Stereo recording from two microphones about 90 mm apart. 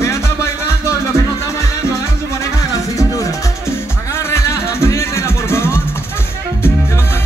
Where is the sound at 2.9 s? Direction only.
35° left (ahead or behind).